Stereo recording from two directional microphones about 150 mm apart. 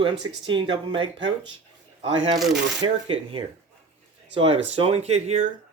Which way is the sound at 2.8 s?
30° right (ahead or behind).